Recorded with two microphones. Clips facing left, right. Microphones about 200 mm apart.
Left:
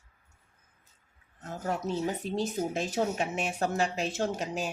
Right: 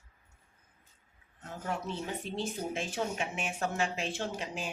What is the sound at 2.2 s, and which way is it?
Speech, 40° left (ahead or behind).